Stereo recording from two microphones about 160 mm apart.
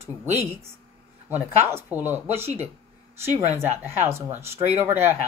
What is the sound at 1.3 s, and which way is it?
Speech, 15° right (ahead or behind).